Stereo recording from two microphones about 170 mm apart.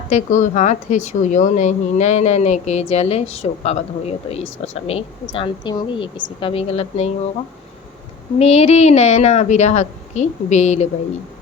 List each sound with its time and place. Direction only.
0.1 s a woman's voice: 45° left (ahead or behind)
8.4 s a woman's voice: 35° left (ahead or behind)